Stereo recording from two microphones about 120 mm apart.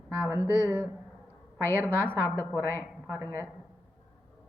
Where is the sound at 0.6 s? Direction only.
10° right (ahead or behind).